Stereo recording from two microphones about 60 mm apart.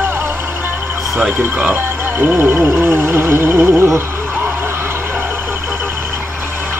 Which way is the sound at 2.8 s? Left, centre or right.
Right.